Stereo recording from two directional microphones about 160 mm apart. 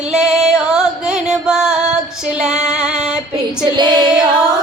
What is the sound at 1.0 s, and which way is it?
Music, 5° right (ahead or behind).